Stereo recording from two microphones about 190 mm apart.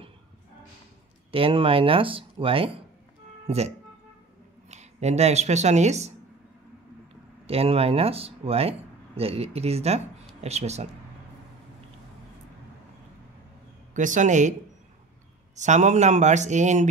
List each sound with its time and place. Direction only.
1.3 s speech: 30° right (ahead or behind)
7.4 s speech: 30° right (ahead or behind)
13.9 s speech: 40° right (ahead or behind)
15.5 s speech: 40° right (ahead or behind)